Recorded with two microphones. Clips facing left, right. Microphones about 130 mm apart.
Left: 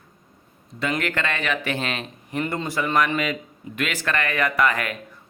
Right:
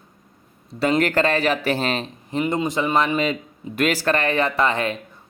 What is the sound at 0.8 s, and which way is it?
Speech, 35° right (ahead or behind).